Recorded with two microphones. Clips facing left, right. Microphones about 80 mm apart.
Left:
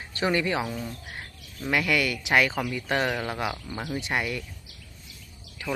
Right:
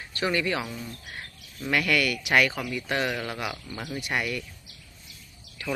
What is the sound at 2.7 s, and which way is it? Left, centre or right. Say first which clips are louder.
Speech: left 2 dB; left.